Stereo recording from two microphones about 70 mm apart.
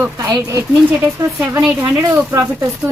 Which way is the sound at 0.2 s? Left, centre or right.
Right.